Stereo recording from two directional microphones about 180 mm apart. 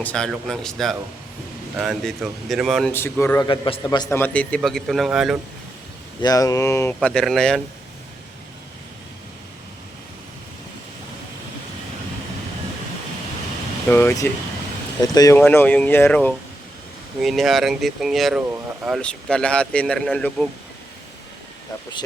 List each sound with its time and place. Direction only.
0.0 s speech: 5° left (ahead or behind)
2.9 s a man's voice: 10° left (ahead or behind)
4.2 s speech: 5° left (ahead or behind)
6.2 s speech: 20° left (ahead or behind)
7.1 s speech: 5° left (ahead or behind)
13.8 s speech: 10° left (ahead or behind)